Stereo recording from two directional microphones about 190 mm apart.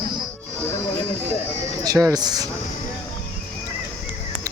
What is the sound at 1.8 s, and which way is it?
Speech, 20° right (ahead or behind).